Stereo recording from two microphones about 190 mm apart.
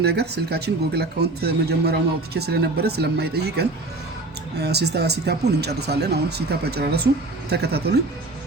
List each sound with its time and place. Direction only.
0.0 s speech: 60° right (ahead or behind)